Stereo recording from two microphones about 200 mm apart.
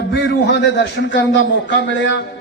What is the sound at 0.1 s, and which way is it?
A man's voice, 60° left (ahead or behind).